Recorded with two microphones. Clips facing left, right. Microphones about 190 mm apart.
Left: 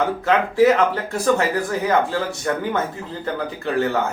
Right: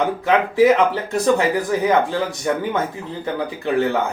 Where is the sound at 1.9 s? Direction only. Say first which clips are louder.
Right 2 dB; 15° right (ahead or behind).